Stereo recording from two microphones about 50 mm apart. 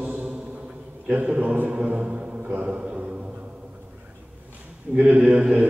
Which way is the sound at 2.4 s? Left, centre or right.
Right.